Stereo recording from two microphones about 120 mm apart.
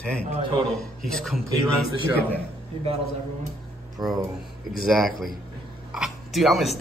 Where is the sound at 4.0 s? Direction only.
35° right (ahead or behind).